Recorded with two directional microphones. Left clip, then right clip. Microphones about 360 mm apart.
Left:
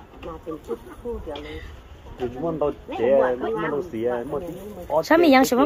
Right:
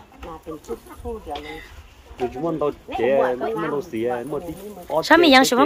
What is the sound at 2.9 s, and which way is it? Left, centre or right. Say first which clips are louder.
Speech: even; right.